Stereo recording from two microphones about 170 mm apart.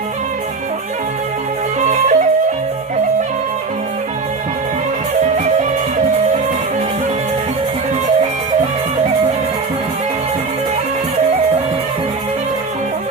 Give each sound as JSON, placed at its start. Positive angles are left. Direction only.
{"t": 1.8, "sound": "music", "side_deg": -45}